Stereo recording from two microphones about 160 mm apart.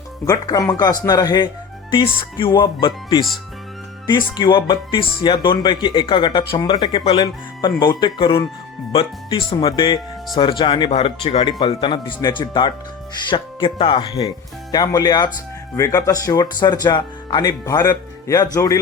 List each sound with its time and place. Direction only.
0.3 s speech: 20° left (ahead or behind)